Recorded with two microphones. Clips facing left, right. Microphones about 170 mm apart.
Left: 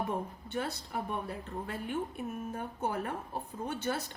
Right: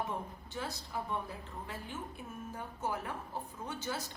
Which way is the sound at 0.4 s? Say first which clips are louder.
Left 5 dB; 60° left (ahead or behind).